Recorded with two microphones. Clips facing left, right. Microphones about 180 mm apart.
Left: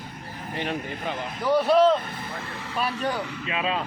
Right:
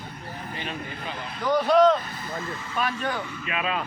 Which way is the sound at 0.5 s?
65° left (ahead or behind).